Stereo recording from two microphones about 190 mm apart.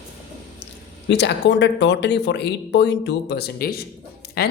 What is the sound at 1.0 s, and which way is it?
Speech, 65° left (ahead or behind).